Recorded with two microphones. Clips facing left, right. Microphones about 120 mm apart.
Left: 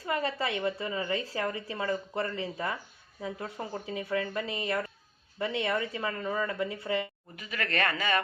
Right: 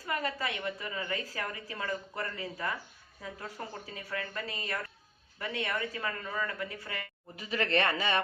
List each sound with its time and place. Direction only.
0.0 s a woman's voice: 25° left (ahead or behind)
7.3 s speech: 30° right (ahead or behind)